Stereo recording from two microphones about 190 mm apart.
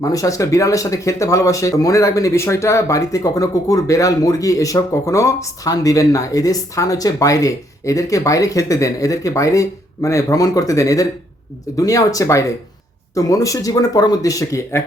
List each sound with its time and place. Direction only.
0.0 s speech: 15° left (ahead or behind)